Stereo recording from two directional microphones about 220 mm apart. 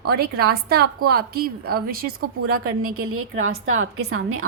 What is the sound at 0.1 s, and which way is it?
A woman's voice, 45° right (ahead or behind).